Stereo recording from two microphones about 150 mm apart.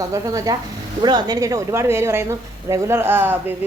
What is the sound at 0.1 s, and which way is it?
A woman's voice, 20° right (ahead or behind).